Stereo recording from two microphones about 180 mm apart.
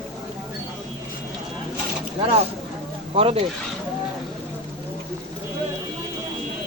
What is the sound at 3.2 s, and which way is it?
Speech, 30° right (ahead or behind).